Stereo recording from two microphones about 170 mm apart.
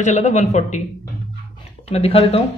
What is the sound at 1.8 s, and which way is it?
Speech, 35° left (ahead or behind).